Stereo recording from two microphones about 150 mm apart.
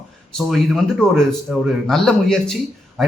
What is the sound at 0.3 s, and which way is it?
A man's voice, centre (ahead or behind).